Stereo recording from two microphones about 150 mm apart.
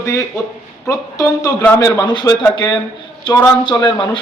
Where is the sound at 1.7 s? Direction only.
20° left (ahead or behind).